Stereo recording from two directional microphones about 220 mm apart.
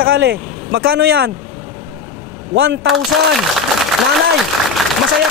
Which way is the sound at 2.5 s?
50° right (ahead or behind).